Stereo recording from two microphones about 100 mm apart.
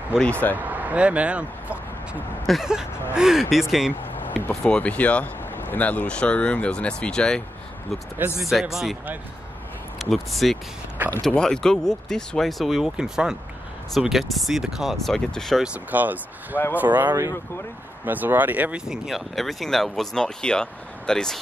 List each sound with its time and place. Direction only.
0.2 s speech: 15° left (ahead or behind)
0.6 s speech: 15° right (ahead or behind)
4.5 s speech: 10° left (ahead or behind)
8.5 s speech: 5° right (ahead or behind)
9.9 s speech: centre (ahead or behind)
15.6 s speech: 15° right (ahead or behind)
18.9 s speech: centre (ahead or behind)